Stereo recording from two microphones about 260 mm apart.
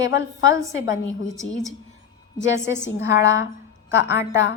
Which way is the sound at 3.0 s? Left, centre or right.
Left.